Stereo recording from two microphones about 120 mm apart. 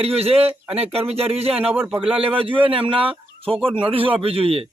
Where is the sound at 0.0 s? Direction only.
55° right (ahead or behind).